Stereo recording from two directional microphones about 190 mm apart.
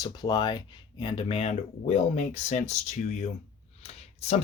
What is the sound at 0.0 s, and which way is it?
Speech, 20° left (ahead or behind).